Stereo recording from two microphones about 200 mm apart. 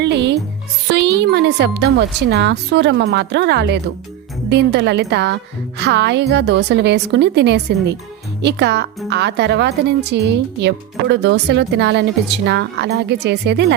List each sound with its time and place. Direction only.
0.0 s music: 60° right (ahead or behind)
0.9 s a woman's voice: 55° right (ahead or behind)